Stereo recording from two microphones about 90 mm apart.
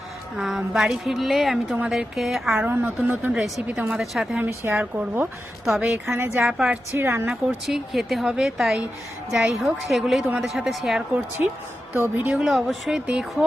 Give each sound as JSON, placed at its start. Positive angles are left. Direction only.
{"t": 0.3, "sound": "a woman's voice", "side_deg": -5}
{"t": 2.6, "sound": "speech", "side_deg": -20}
{"t": 3.3, "sound": "a woman's voice", "side_deg": 0}
{"t": 3.7, "sound": "a woman's voice", "side_deg": -15}
{"t": 4.7, "sound": "speech", "side_deg": -20}
{"t": 5.6, "sound": "a woman's voice", "side_deg": -5}
{"t": 6.1, "sound": "speech", "side_deg": -30}
{"t": 6.4, "sound": "a woman's voice", "side_deg": -10}
{"t": 6.9, "sound": "speech", "side_deg": -30}
{"t": 7.3, "sound": "a woman's voice", "side_deg": 0}
{"t": 11.4, "sound": "a woman's voice", "side_deg": -20}
{"t": 12.3, "sound": "a woman's voice", "side_deg": -5}